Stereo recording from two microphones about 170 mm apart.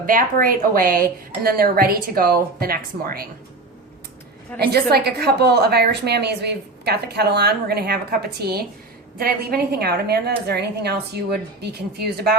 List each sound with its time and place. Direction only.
0.0 s speech: 55° right (ahead or behind)
4.5 s a woman's voice: 65° right (ahead or behind)